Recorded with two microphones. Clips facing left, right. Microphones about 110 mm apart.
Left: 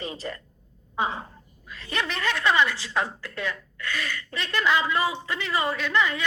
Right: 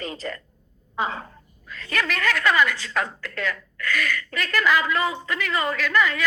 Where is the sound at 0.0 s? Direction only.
20° left (ahead or behind).